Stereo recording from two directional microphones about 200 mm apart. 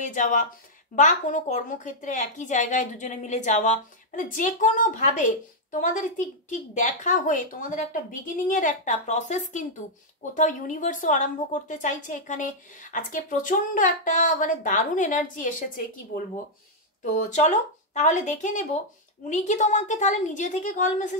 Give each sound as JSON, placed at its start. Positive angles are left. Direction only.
{"t": 0.0, "sound": "a woman's voice", "side_deg": 40}
{"t": 17.1, "sound": "a woman's voice", "side_deg": 35}